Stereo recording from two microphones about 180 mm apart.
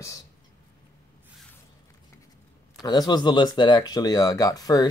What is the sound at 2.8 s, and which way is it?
Speech, 20° left (ahead or behind).